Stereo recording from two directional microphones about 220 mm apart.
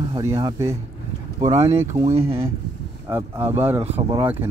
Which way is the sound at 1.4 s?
30° right (ahead or behind).